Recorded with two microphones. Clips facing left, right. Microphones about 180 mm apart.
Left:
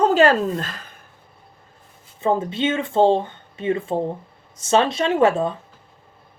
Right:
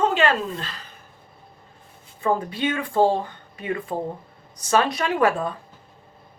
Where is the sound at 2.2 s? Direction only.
25° left (ahead or behind).